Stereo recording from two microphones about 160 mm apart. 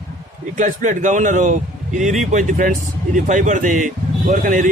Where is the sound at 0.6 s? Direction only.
50° right (ahead or behind).